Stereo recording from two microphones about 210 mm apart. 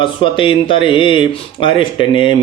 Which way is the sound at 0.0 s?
25° left (ahead or behind).